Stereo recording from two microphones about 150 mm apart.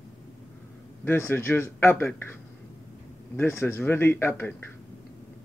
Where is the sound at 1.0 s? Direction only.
15° left (ahead or behind).